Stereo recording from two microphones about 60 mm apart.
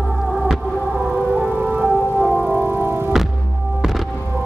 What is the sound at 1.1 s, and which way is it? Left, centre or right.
Music, right.